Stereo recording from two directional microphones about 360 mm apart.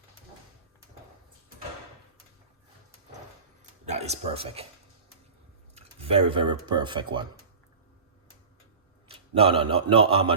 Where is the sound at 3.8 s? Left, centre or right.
Centre.